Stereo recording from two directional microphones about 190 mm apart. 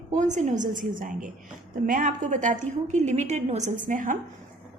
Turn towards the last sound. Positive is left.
turn(degrees=-45)  # may be behind; listen again after turning